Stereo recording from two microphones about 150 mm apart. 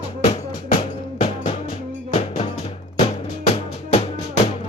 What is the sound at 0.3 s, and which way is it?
Music, 40° left (ahead or behind).